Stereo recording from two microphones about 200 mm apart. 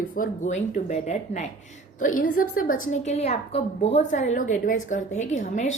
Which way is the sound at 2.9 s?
35° left (ahead or behind).